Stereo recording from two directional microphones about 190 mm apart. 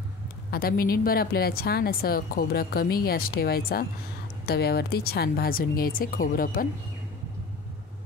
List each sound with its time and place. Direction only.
0.5 s a woman's voice: 50° left (ahead or behind)